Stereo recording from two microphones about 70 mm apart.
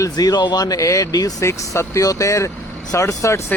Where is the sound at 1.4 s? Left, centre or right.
Left.